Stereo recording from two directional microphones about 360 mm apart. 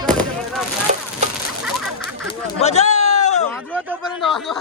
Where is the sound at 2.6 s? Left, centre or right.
Centre.